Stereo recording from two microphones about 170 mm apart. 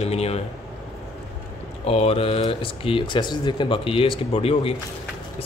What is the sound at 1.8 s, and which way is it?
Speech, 35° left (ahead or behind).